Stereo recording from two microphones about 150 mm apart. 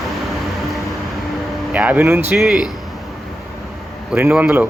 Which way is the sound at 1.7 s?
10° right (ahead or behind).